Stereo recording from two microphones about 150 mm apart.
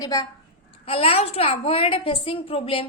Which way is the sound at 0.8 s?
40° left (ahead or behind).